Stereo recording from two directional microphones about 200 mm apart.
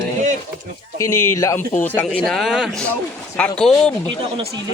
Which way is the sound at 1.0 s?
15° left (ahead or behind).